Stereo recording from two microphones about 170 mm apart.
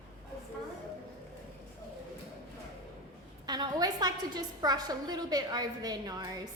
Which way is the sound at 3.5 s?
25° right (ahead or behind).